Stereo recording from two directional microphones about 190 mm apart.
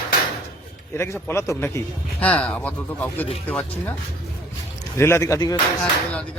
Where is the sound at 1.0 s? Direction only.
15° left (ahead or behind).